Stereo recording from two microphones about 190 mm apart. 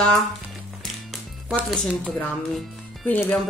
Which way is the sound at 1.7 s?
Centre (ahead or behind).